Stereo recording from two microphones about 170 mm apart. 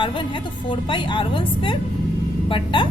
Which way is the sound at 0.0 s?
30° left (ahead or behind).